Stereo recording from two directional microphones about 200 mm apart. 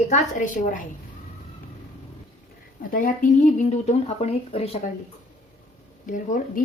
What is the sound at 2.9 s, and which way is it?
Speech, 45° left (ahead or behind).